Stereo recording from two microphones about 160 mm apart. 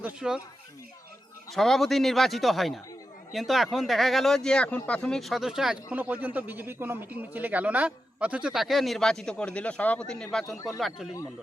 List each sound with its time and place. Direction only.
0.0 s speech: 5° right (ahead or behind)
1.5 s speech: centre (ahead or behind)
10.4 s speech: 20° left (ahead or behind)
10.7 s speech: centre (ahead or behind)